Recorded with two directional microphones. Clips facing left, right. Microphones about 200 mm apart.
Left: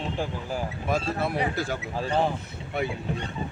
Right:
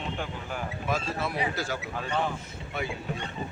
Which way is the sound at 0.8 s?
50° left (ahead or behind).